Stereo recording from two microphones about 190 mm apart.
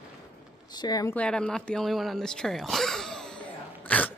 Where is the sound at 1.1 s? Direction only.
5° left (ahead or behind).